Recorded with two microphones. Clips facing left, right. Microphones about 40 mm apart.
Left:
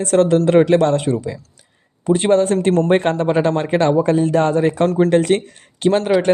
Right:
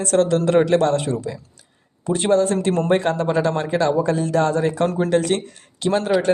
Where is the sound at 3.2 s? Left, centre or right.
Left.